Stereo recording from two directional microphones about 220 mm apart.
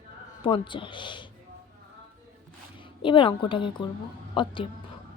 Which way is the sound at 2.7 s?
20° left (ahead or behind).